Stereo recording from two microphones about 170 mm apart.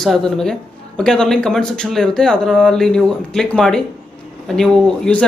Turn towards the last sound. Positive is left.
turn(degrees=5)  # may be behind; listen again after turning